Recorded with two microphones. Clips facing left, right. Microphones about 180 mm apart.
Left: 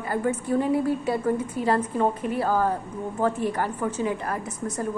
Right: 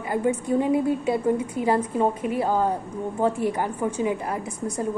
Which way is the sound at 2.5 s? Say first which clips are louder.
Right 1 dB; 20° right (ahead or behind).